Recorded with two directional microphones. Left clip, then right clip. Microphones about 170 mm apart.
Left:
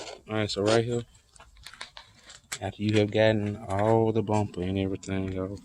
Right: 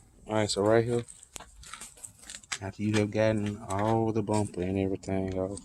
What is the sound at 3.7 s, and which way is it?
Speech, 35° left (ahead or behind).